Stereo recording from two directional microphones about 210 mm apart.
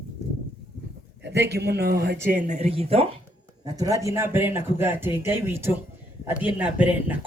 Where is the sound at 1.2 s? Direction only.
50° right (ahead or behind); by 3.1 s 30° right (ahead or behind).